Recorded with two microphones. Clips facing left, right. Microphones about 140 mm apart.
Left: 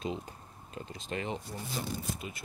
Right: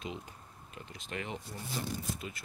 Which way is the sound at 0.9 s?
30° left (ahead or behind).